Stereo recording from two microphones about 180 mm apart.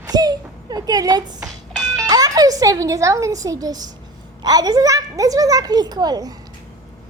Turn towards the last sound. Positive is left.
turn(degrees=-20)  # may be behind; listen again after turning